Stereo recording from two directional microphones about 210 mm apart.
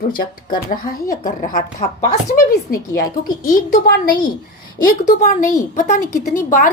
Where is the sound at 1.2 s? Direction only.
40° left (ahead or behind).